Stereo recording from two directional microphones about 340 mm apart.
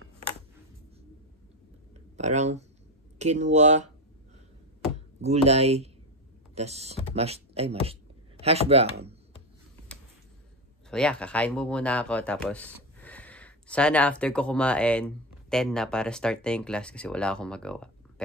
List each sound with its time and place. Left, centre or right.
2.1 s speech: centre
5.2 s speech: centre
7.2 s a sound: centre
8.6 s speech: centre
10.9 s speech: centre